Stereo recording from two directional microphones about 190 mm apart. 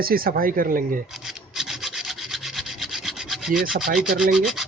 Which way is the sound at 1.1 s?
Centre (ahead or behind).